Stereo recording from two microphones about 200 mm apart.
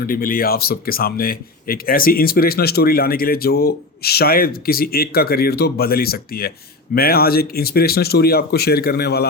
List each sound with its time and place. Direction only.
0.0 s speech: 45° left (ahead or behind)